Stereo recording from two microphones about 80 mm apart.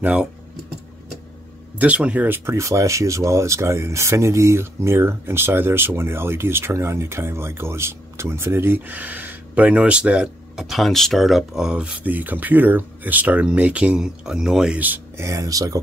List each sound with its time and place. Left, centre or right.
0.0 s speech: centre
1.8 s speech: centre
2.2 s speech: right; by 14.8 s centre
15.1 s speech: right